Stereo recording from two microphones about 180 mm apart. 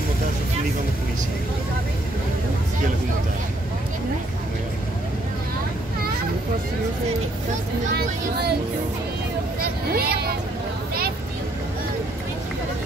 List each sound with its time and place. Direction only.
7.9 s speech: 65° right (ahead or behind)
9.6 s vehicle: 60° right (ahead or behind)